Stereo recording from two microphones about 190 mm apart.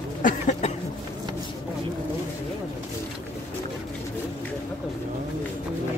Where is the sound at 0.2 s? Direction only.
40° left (ahead or behind).